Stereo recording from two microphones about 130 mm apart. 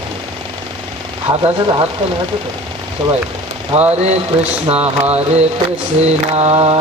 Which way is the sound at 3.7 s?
50° right (ahead or behind).